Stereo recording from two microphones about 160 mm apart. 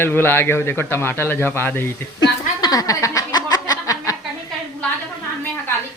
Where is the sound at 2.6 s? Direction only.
25° left (ahead or behind).